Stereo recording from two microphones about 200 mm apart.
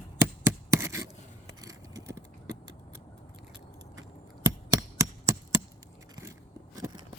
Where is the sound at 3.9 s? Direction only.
20° right (ahead or behind).